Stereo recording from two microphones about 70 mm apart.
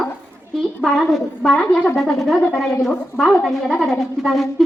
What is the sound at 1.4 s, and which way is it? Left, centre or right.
Speech, centre.